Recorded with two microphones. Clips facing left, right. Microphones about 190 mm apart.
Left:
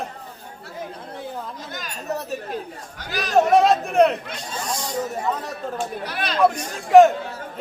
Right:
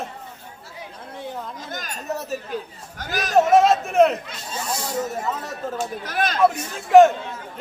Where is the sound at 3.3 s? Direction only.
Centre (ahead or behind).